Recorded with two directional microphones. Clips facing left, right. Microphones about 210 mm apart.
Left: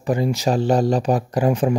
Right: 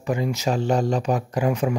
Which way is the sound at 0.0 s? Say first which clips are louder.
Left 4 dB; 35° left (ahead or behind).